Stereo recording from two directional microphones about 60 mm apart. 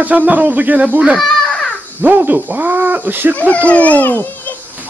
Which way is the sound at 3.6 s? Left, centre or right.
Left.